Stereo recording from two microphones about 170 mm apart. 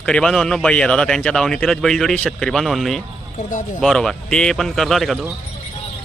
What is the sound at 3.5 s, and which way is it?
Speech, 50° left (ahead or behind).